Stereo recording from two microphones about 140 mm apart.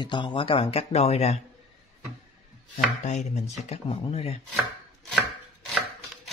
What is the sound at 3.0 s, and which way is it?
Speech, 55° left (ahead or behind).